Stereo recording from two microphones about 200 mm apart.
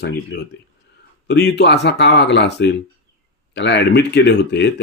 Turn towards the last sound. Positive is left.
turn(degrees=55)  # may be behind; listen again after turning